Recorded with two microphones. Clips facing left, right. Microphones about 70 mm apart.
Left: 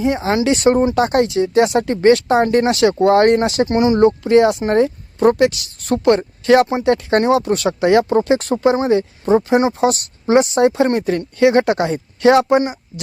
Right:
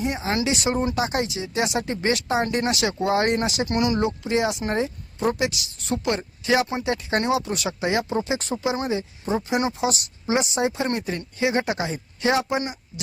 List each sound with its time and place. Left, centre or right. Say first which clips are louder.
0.4 s speech: left 12 dB; left
0.9 s speech: left 10 dB; left
3.7 s speech: left 7 dB; left
4.2 s speech: left 11 dB; left
9.5 s speech: left 9 dB; left
9.8 s speech: left 8 dB; left